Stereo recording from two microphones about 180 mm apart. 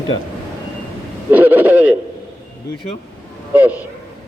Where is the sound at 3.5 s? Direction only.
10° right (ahead or behind).